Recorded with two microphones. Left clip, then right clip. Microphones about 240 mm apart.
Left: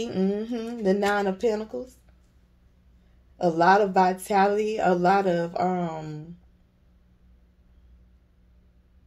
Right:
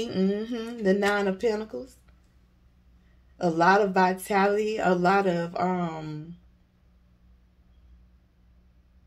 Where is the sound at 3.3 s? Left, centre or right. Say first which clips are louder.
Left 2 dB; centre.